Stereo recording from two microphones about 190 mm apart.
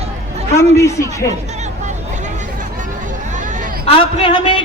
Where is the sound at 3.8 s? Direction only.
30° left (ahead or behind).